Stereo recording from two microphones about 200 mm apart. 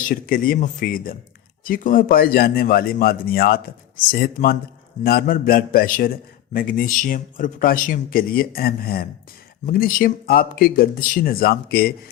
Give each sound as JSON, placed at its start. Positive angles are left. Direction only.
{"t": 0.1, "sound": "a man's voice", "side_deg": 45}